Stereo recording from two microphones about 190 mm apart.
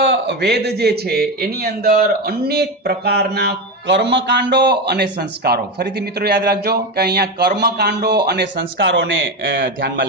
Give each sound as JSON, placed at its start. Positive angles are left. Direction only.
{"t": 0.0, "sound": "a man's voice", "side_deg": -65}